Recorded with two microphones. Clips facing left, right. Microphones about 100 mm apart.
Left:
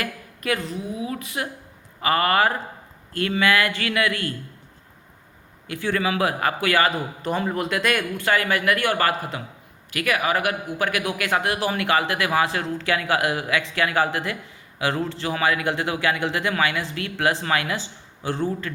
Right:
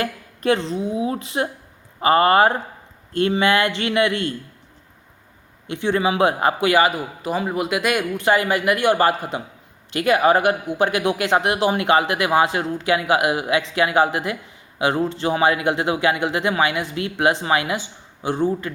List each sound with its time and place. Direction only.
0.0 s a man's voice: 30° right (ahead or behind)
5.6 s a man's voice: 25° right (ahead or behind)